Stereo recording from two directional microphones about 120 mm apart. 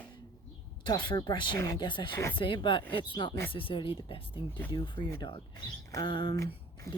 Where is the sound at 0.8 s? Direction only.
40° left (ahead or behind).